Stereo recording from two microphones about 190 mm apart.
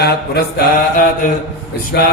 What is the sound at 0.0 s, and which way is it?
Mantra, 60° left (ahead or behind).